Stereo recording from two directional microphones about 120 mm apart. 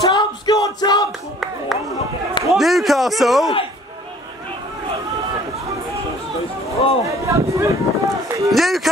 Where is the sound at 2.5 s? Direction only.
Centre (ahead or behind).